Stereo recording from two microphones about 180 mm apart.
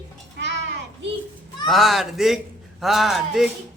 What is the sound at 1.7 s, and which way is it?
A man's voice, centre (ahead or behind).